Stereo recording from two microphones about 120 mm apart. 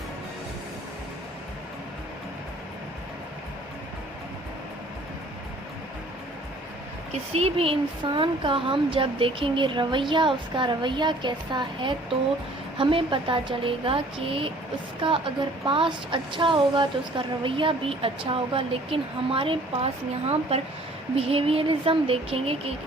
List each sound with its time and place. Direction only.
7.1 s speech: 60° right (ahead or behind)